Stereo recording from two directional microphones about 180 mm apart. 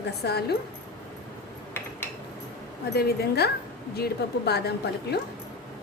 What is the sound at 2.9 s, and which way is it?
A woman's voice, 65° left (ahead or behind).